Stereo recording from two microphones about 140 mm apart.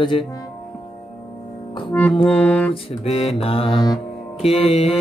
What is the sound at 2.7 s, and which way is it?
Music, 50° left (ahead or behind).